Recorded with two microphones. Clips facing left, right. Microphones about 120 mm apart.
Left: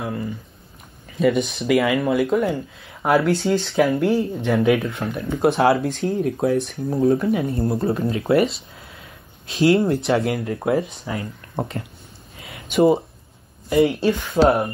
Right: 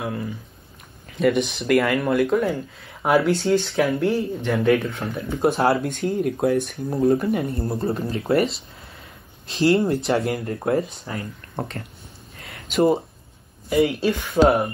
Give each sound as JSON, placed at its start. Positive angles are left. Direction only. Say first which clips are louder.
{"t": 0.0, "sound": "speech", "louder": "left 1 dB", "side_deg": 0}
{"t": 11.1, "sound": "speech", "louder": "left 3 dB", "side_deg": 20}
{"t": 12.4, "sound": "a sound", "louder": "left 3 dB", "side_deg": 0}
{"t": 13.7, "sound": "speech", "louder": "left 2 dB", "side_deg": 0}